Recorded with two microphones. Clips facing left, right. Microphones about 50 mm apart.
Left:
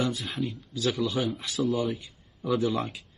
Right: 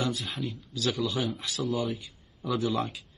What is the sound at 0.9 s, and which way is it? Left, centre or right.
Speech, centre.